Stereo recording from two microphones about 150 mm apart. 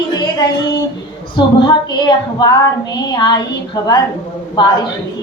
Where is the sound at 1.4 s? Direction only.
30° left (ahead or behind).